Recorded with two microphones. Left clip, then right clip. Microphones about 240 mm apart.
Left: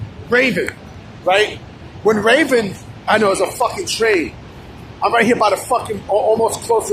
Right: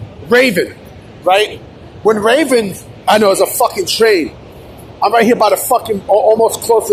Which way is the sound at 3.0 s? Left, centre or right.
Right.